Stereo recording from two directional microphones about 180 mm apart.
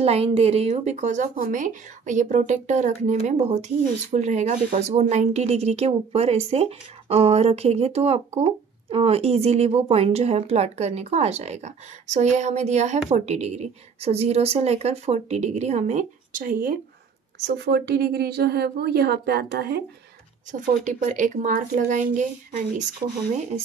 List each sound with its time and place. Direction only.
0.0 s speech: 35° right (ahead or behind); by 16.7 s 50° right (ahead or behind)
17.6 s a woman's voice: 65° right (ahead or behind)
20.8 s speech: 45° right (ahead or behind)